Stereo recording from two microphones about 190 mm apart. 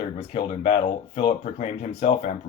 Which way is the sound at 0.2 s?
30° left (ahead or behind).